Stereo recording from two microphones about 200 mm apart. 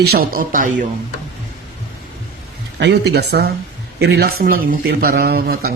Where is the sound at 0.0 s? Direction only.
50° right (ahead or behind).